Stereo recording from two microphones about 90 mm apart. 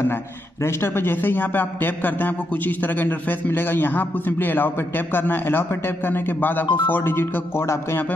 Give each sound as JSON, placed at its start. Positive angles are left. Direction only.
{"t": 0.1, "sound": "a man's voice", "side_deg": 30}